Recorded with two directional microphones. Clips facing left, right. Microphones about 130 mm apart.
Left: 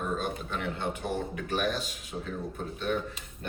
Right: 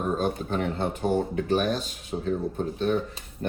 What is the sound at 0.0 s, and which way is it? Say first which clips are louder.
Speech: right 6 dB; 35° right (ahead or behind).